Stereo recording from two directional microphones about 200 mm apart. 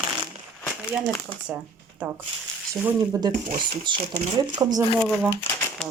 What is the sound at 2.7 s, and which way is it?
Speech, 15° right (ahead or behind).